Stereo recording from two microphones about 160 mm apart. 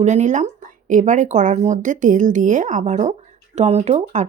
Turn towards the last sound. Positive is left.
turn(degrees=-45)  # may be behind; listen again after turning